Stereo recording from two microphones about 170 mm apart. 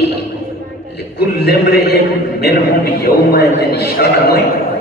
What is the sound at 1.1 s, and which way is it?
Speech, 75° left (ahead or behind).